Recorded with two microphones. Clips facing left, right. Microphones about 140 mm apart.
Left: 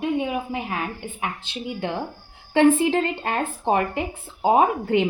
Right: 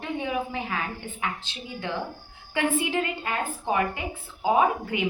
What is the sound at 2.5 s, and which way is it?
A woman's voice, 35° left (ahead or behind).